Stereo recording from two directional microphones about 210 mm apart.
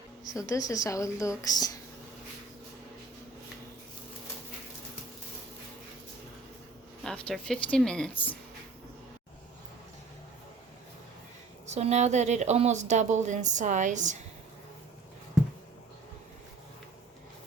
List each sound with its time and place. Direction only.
0.3 s a woman's voice: 15° left (ahead or behind)
7.0 s a woman's voice: 5° left (ahead or behind)
11.6 s a woman's voice: 30° right (ahead or behind)